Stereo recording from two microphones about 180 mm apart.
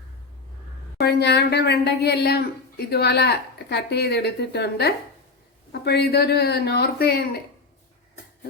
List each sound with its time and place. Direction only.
0.9 s speech: 65° left (ahead or behind)